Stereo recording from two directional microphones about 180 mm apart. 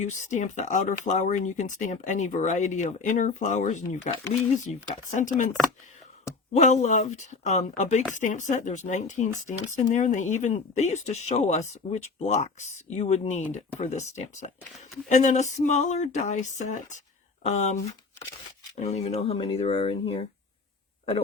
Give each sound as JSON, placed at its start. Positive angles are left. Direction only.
{"t": 0.0, "sound": "speech", "side_deg": 40}
{"t": 6.5, "sound": "speech", "side_deg": 40}
{"t": 18.8, "sound": "speech", "side_deg": 35}